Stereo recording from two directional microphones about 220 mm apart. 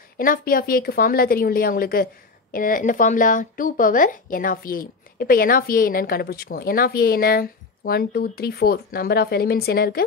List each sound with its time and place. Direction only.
0.2 s a woman's voice: 40° left (ahead or behind)